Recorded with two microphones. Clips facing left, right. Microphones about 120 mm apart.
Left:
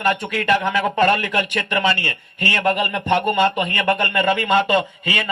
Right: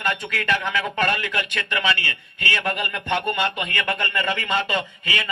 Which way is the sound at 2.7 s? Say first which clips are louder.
Left 6 dB; 20° left (ahead or behind).